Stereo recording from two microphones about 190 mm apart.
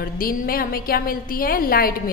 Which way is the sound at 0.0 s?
50° left (ahead or behind).